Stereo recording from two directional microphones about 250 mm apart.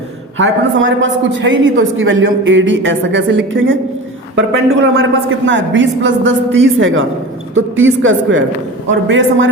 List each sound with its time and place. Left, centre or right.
0.3 s a woman's voice: right